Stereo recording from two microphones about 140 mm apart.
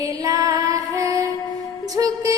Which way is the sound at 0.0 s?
25° right (ahead or behind).